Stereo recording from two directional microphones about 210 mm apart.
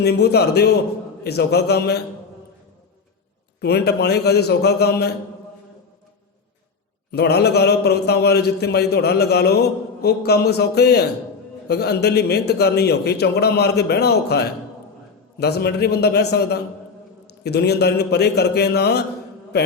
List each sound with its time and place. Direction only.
0.0 s a man's voice: 50° left (ahead or behind)
3.6 s a man's voice: 50° left (ahead or behind)
7.1 s a man's voice: 50° left (ahead or behind)
19.5 s a sound: 50° left (ahead or behind)